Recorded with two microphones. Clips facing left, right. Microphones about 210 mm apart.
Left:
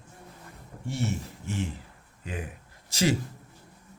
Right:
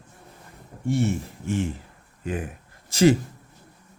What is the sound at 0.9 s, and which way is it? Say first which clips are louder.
Speech: right 8 dB; 55° right (ahead or behind).